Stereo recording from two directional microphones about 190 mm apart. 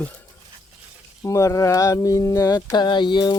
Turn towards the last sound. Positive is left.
turn(degrees=25)  # may be behind; listen again after turning